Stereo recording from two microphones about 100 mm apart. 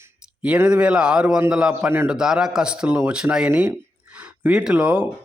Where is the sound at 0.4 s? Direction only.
10° right (ahead or behind).